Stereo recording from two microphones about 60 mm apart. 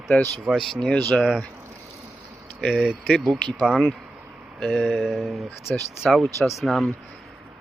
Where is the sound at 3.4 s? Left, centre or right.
Centre.